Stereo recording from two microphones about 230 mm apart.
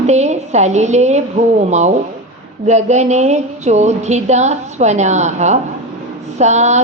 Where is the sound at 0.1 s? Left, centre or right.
Right.